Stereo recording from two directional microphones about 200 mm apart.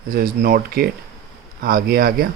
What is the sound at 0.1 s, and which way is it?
Speech, 45° right (ahead or behind).